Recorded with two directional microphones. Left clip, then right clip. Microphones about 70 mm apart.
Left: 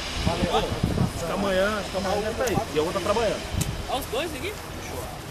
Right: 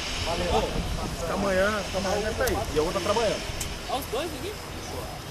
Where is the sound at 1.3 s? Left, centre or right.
Left.